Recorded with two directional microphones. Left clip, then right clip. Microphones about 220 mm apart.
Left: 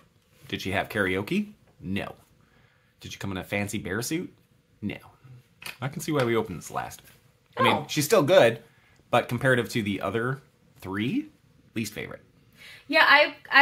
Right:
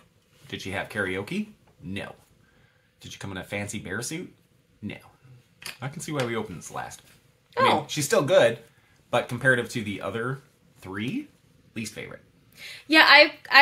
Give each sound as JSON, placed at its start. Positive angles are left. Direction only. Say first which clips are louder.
{"t": 0.5, "sound": "speech", "louder": "left 3 dB", "side_deg": 30}
{"t": 3.0, "sound": "speech", "louder": "left 2 dB", "side_deg": 30}
{"t": 12.5, "sound": "a woman's voice", "louder": "right 3 dB", "side_deg": -50}